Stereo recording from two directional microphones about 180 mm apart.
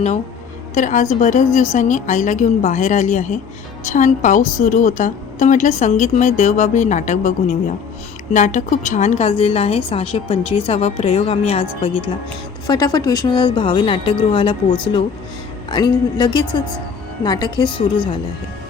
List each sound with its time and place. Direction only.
0.7 s a woman's voice: 45° left (ahead or behind)
12.6 s speech: 20° left (ahead or behind)